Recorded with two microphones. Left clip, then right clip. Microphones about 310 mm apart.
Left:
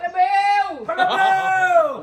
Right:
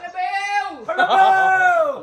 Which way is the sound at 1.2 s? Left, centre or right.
Centre.